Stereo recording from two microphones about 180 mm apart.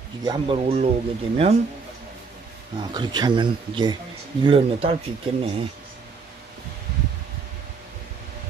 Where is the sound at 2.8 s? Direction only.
25° right (ahead or behind).